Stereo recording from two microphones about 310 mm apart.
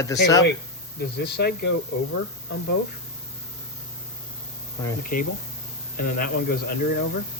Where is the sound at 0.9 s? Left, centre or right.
Left.